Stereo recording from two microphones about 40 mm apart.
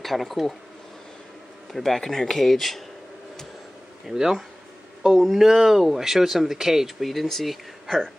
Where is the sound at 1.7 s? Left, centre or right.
Centre.